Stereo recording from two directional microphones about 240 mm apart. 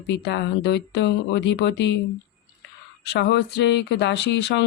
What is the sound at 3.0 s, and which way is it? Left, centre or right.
Speech, left.